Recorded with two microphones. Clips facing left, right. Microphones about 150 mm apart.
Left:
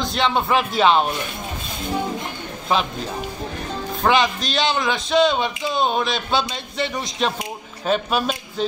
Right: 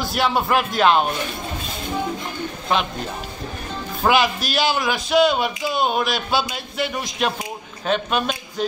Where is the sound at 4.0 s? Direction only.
5° right (ahead or behind).